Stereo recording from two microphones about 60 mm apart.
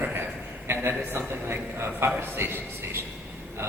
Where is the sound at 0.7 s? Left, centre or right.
Right.